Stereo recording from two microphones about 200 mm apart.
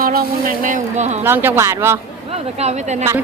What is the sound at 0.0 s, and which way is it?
Speech, 45° right (ahead or behind).